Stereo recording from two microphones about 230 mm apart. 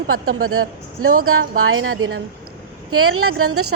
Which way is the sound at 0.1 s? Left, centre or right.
Right.